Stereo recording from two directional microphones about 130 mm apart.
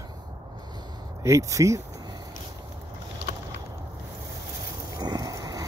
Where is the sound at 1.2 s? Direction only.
25° right (ahead or behind).